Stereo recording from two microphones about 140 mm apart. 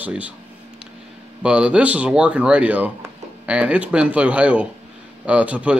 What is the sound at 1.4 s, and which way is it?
Speech, 5° right (ahead or behind).